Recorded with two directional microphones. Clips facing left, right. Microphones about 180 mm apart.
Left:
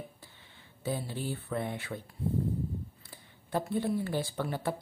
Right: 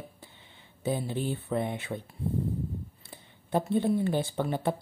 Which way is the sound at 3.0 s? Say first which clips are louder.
Right 3 dB; 20° right (ahead or behind).